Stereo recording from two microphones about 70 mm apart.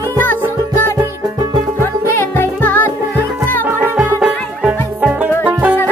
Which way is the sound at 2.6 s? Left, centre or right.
Left.